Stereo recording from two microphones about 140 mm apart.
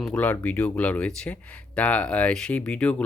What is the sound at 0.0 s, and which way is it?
Speech, 10° left (ahead or behind).